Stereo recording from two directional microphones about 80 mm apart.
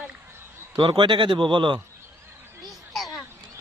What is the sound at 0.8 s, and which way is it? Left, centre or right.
Speech, right.